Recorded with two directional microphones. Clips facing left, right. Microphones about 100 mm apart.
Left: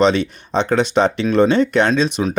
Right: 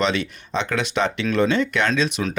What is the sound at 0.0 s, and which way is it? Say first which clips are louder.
Speech: left 7 dB; 35° left (ahead or behind).